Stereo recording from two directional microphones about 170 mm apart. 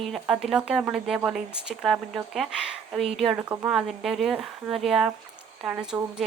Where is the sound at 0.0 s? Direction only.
Centre (ahead or behind).